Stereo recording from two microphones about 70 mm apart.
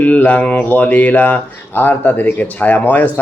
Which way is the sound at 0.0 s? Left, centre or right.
Left.